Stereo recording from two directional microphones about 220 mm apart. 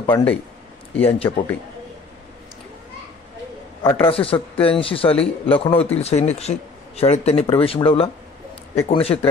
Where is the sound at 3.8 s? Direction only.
25° left (ahead or behind).